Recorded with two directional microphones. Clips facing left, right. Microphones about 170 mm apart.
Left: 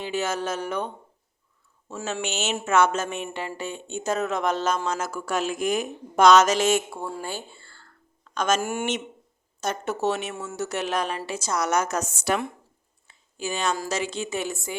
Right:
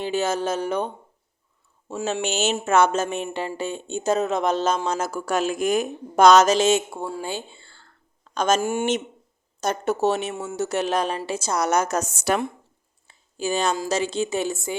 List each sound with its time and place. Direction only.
0.0 s speech: 30° right (ahead or behind)
2.2 s speech: 35° right (ahead or behind)
8.2 s a sound: 35° right (ahead or behind)
8.6 s speech: 25° right (ahead or behind)
9.6 s speech: 40° right (ahead or behind)
10.3 s speech: 20° right (ahead or behind); by 12.4 s 45° right (ahead or behind)
13.1 s a sound: 35° right (ahead or behind)
13.8 s speech: 30° right (ahead or behind)